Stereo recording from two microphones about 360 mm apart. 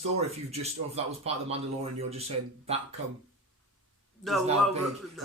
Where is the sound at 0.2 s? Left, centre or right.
Centre.